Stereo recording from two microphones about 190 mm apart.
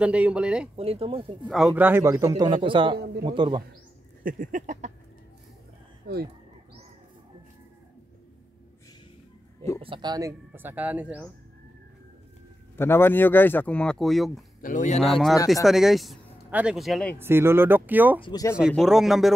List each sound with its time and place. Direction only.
0.0 s speech: 5° right (ahead or behind)
0.7 s speech: 30° right (ahead or behind)
1.5 s a man's voice: 5° right (ahead or behind); by 3.6 s 25° right (ahead or behind)
4.2 s a sound: 45° right (ahead or behind)
9.8 s a man's voice: 25° right (ahead or behind); by 11.2 s 10° right (ahead or behind)
12.7 s speech: 10° left (ahead or behind)
14.6 s speech: 40° left (ahead or behind)
15.0 s speech: centre (ahead or behind)
17.2 s a man's voice: 10° right (ahead or behind)
18.2 s speech: 20° left (ahead or behind)
18.8 s speech: centre (ahead or behind)